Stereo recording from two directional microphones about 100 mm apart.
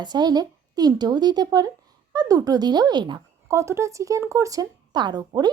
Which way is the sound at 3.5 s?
30° right (ahead or behind).